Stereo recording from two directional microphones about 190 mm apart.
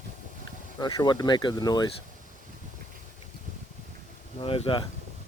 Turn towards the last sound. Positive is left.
turn(degrees=30)  # may be behind; listen again after turning